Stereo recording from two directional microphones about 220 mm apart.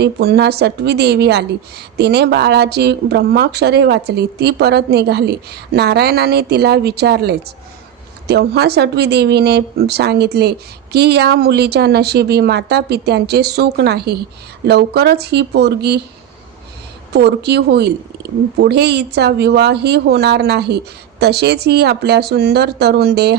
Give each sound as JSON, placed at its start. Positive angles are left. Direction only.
{"t": 0.0, "sound": "a woman's voice", "side_deg": -45}
{"t": 17.2, "sound": "a woman's voice", "side_deg": -50}